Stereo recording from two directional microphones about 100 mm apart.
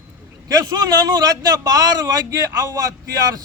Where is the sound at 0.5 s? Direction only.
40° right (ahead or behind).